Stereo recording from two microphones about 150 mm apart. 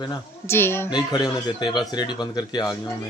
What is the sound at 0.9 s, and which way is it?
A man's voice, 30° left (ahead or behind).